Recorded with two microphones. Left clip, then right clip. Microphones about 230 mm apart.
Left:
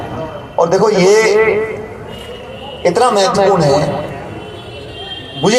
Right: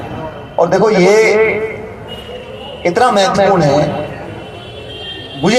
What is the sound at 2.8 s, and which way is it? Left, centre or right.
A man's voice, left.